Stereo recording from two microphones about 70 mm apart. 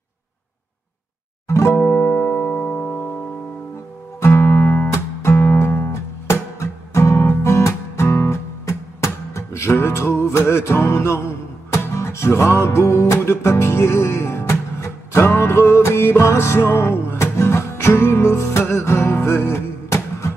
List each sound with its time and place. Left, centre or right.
1.5 s music: left
1.8 s music: left
4.2 s guitar: left
4.9 s music: left